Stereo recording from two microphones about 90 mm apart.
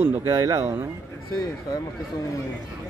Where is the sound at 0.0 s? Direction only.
35° right (ahead or behind).